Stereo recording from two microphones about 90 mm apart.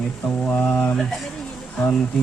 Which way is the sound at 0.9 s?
Centre (ahead or behind).